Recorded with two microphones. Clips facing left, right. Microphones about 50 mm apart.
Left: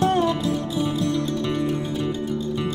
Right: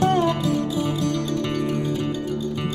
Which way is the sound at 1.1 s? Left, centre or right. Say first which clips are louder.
Even; right.